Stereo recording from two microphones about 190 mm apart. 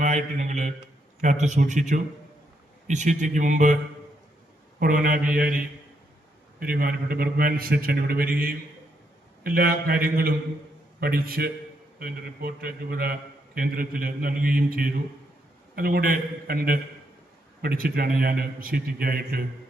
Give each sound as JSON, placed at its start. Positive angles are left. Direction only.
{"t": 0.0, "sound": "a man's voice", "side_deg": -35}
{"t": 4.8, "sound": "a man's voice", "side_deg": -45}
{"t": 6.6, "sound": "a man's voice", "side_deg": -50}